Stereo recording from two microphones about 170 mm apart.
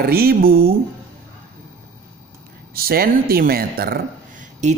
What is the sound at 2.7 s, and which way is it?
Speech, 60° right (ahead or behind).